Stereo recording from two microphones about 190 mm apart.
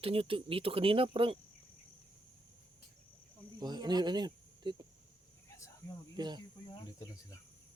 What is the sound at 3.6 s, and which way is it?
Speech, 20° right (ahead or behind).